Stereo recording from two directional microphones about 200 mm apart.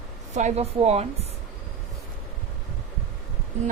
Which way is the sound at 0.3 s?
35° right (ahead or behind).